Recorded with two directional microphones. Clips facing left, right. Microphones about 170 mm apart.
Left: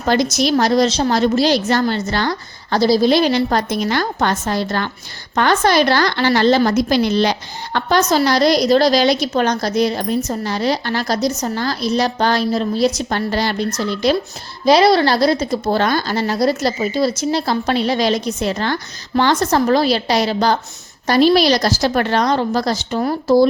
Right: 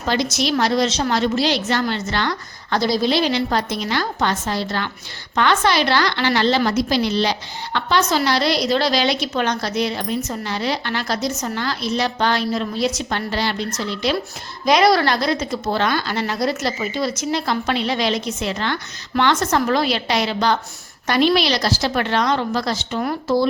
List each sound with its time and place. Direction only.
0.0 s a woman's voice: 45° left (ahead or behind)
3.1 s a woman's voice: 45° left (ahead or behind)
14.6 s a woman's voice: 30° left (ahead or behind)